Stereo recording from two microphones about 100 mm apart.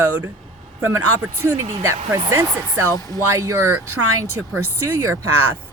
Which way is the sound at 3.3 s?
30° right (ahead or behind).